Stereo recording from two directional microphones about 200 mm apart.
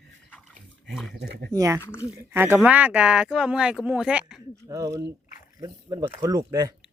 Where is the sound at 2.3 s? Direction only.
10° right (ahead or behind).